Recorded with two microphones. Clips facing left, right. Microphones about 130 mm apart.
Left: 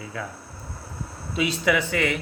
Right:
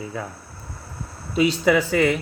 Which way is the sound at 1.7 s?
35° right (ahead or behind).